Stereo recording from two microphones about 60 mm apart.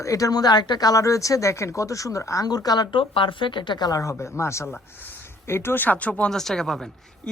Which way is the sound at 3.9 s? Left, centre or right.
Left.